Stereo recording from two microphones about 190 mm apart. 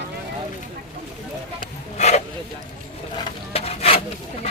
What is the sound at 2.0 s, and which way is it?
Zipper, 35° left (ahead or behind).